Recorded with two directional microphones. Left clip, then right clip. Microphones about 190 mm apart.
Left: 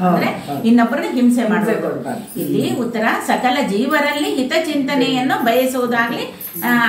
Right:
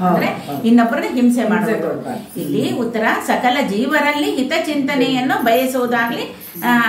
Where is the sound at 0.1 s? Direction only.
15° right (ahead or behind).